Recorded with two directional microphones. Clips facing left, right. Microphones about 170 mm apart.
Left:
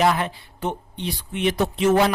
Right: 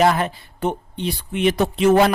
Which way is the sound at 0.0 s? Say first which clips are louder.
Right 3 dB; 45° right (ahead or behind).